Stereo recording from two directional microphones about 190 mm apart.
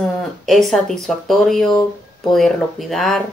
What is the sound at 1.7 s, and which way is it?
Speech, 20° left (ahead or behind).